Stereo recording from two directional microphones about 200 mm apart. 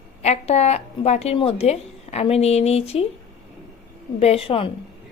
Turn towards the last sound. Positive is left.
turn(degrees=25)  # may be behind; listen again after turning